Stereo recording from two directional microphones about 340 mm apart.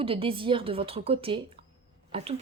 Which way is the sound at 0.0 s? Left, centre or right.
Centre.